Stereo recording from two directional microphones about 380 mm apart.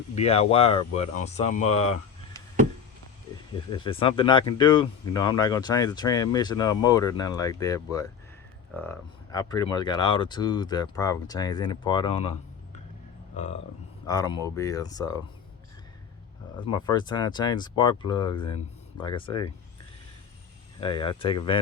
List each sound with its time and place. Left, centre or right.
0.2 s speech: centre
3.5 s speech: centre
13.3 s speech: centre
16.6 s speech: centre
20.8 s speech: centre